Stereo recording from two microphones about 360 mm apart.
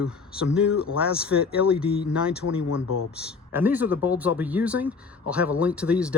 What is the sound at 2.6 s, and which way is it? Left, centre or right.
Speech, left.